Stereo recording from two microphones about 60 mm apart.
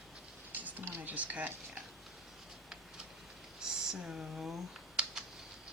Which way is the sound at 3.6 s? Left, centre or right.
Centre.